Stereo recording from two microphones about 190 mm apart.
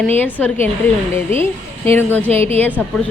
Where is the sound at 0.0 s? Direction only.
10° left (ahead or behind).